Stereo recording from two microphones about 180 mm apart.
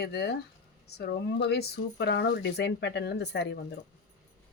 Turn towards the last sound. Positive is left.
turn(degrees=70)  # may be behind; listen again after turning